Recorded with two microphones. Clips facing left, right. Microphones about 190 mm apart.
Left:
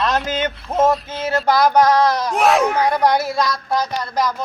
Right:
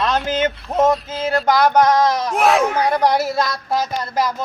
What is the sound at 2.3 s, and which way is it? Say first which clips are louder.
Speech: even; centre (ahead or behind).